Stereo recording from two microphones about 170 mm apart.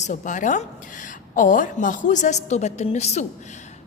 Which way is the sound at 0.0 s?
45° left (ahead or behind).